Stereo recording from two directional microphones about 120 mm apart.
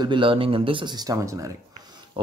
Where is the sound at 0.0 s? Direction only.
45° right (ahead or behind); by 1.5 s 25° right (ahead or behind).